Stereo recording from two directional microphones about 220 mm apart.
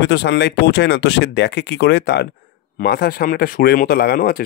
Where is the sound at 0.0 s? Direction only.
50° left (ahead or behind).